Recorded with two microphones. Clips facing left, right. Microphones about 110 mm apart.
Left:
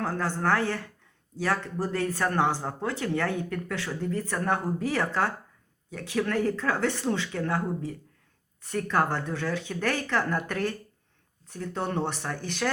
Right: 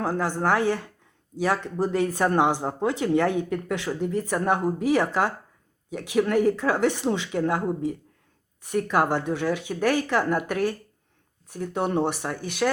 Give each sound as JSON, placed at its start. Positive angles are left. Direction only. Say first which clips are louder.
{"t": 0.0, "sound": "speech", "louder": "right 3 dB", "side_deg": -15}